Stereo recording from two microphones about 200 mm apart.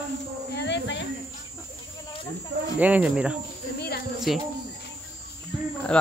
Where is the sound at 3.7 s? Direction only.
55° left (ahead or behind).